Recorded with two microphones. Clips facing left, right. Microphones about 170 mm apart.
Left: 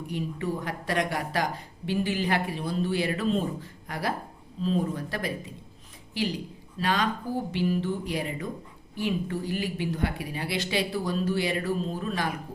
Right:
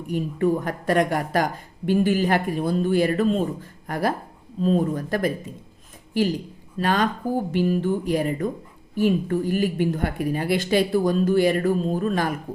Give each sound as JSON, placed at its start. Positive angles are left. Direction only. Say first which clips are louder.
{"t": 0.1, "sound": "a woman's voice", "louder": "right 10 dB", "side_deg": -50}